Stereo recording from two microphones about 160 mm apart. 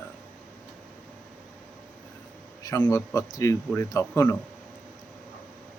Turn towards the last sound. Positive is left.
turn(degrees=15)  # may be behind; listen again after turning